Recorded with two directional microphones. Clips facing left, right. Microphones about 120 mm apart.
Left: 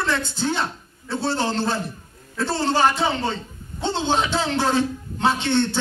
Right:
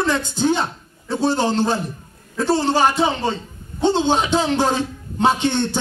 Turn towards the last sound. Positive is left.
turn(degrees=-15)  # may be behind; listen again after turning